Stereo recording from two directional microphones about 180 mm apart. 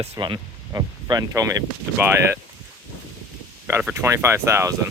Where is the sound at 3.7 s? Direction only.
10° right (ahead or behind).